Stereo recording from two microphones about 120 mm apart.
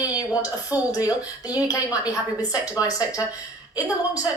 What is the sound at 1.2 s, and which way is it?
A woman's voice, 30° left (ahead or behind).